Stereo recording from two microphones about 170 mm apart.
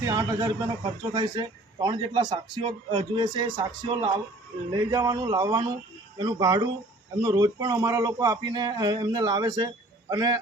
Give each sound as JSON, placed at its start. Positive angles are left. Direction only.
{"t": 0.0, "sound": "a man's voice", "side_deg": -20}